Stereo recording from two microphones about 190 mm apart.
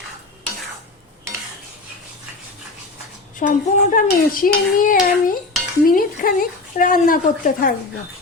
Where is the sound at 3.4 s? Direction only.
45° left (ahead or behind).